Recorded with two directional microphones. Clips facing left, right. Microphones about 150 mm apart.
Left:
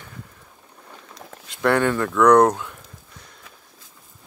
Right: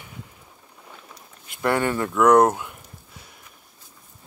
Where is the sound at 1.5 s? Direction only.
5° right (ahead or behind).